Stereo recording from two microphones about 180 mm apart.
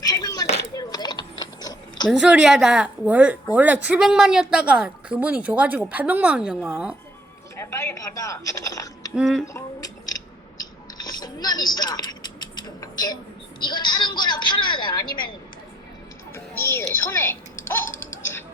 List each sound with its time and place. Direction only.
0.0 s a sound: 20° left (ahead or behind)
0.8 s mechanisms: 20° left (ahead or behind)
2.0 s a woman's voice: centre (ahead or behind)
7.5 s speech: 15° left (ahead or behind)
9.1 s a woman's voice: centre (ahead or behind)
9.5 s a sound: 20° left (ahead or behind)
13.7 s a woman's voice: 25° left (ahead or behind)
16.3 s speech: 15° left (ahead or behind)